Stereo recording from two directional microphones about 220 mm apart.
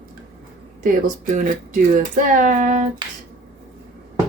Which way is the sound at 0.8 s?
35° right (ahead or behind).